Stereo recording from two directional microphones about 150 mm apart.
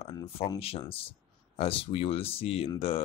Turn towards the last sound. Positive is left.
turn(degrees=40)  # may be behind; listen again after turning